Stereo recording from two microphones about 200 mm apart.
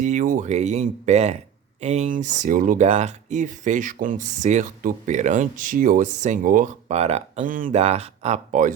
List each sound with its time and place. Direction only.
0.0 s speech: 40° right (ahead or behind)